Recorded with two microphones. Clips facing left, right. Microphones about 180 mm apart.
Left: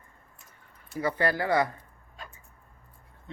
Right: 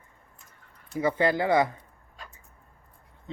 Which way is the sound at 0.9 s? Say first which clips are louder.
Right 3 dB; 20° right (ahead or behind).